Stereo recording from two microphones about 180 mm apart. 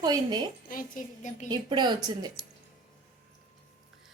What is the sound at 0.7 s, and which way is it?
Speech, 50° left (ahead or behind).